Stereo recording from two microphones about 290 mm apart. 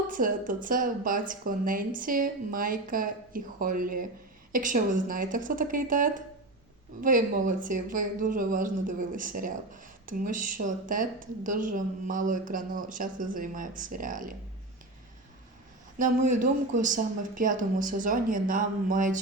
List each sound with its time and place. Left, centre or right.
0.1 s speech: right
16.0 s speech: right